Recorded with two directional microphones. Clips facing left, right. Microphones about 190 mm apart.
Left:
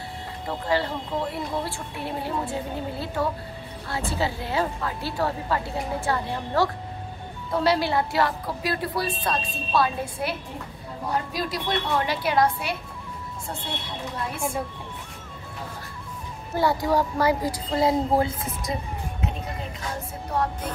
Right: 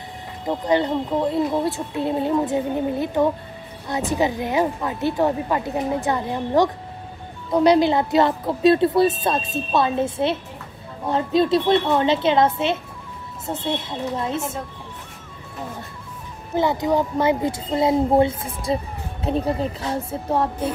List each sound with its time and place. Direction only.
0.5 s a woman's voice: 20° right (ahead or behind)
16.5 s speech: 20° right (ahead or behind)